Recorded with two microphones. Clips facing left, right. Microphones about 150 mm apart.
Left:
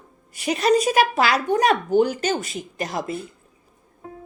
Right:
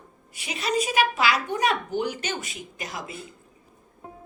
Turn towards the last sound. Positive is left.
turn(degrees=40)  # may be behind; listen again after turning